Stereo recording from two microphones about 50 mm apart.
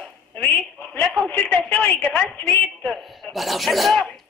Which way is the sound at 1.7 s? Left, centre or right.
Left.